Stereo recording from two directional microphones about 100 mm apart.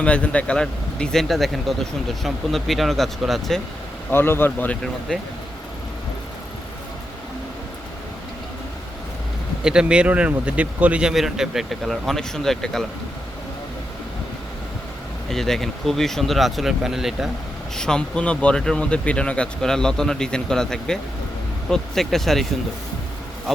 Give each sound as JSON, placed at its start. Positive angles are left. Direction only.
{"t": 0.0, "sound": "speech", "side_deg": 10}
{"t": 4.1, "sound": "speech", "side_deg": 20}
{"t": 4.8, "sound": "speech", "side_deg": 5}
{"t": 9.6, "sound": "a man's voice", "side_deg": -10}
{"t": 15.3, "sound": "speech", "side_deg": 5}
{"t": 17.7, "sound": "speech", "side_deg": 5}